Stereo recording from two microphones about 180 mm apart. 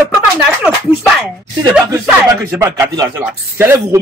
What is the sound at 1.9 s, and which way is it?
Speech, 15° right (ahead or behind).